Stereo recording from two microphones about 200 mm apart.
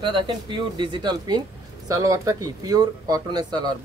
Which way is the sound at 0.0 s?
25° right (ahead or behind).